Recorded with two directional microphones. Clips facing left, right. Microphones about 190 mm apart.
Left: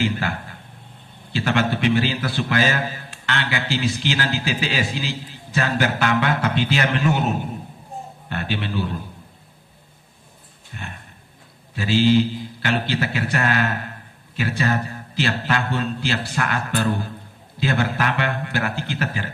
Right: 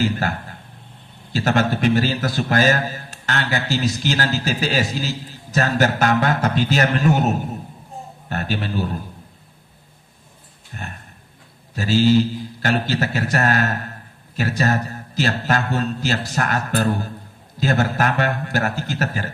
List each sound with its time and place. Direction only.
0.0 s a man's voice: 40° right (ahead or behind)
10.7 s a man's voice: 45° right (ahead or behind)